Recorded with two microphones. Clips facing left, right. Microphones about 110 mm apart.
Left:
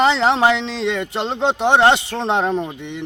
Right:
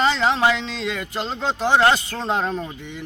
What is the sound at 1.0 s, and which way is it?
Speech, 25° left (ahead or behind).